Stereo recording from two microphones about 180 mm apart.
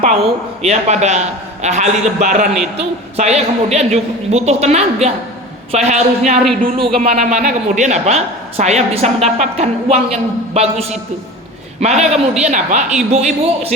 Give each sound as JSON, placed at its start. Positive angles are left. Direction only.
{"t": 0.6, "sound": "a man's voice", "side_deg": -40}